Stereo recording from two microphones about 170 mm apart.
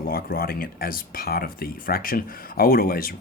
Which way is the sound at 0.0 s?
60° left (ahead or behind).